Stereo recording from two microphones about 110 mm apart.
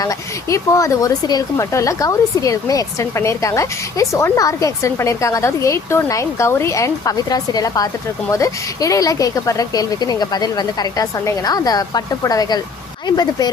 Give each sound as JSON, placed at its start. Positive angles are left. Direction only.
{"t": 0.0, "sound": "speech", "side_deg": 30}